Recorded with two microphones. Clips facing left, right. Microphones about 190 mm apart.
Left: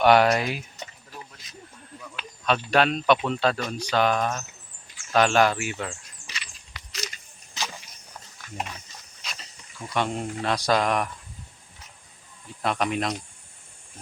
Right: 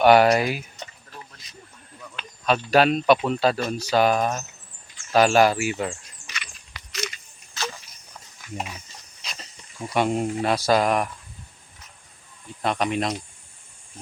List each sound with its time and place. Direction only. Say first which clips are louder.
0.0 s speech: right 3 dB; 5° right (ahead or behind)
2.5 s speech: right 3 dB; 5° right (ahead or behind)
6.2 s a sound: right 2 dB; 30° left (ahead or behind)
6.9 s biting: right 5 dB; 40° left (ahead or behind)
7.6 s a sound: right 3 dB; 15° left (ahead or behind)
8.5 s speech: right 1 dB; 5° right (ahead or behind)
9.2 s snake: even; centre (ahead or behind)
9.9 s speech: right 5 dB; 10° right (ahead or behind)
12.6 s speech: right 2 dB; centre (ahead or behind)